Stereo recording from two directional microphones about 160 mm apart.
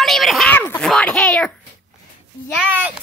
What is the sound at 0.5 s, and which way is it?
Speech, 10° left (ahead or behind).